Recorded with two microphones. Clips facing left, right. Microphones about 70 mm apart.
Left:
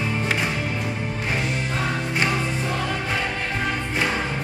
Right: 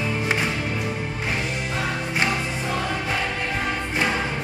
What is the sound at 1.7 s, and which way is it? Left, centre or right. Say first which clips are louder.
Music: left 1 dB; centre.